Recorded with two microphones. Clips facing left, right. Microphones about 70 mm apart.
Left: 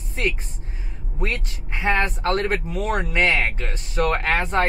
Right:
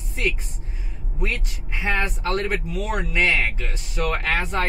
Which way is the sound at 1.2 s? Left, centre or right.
Left.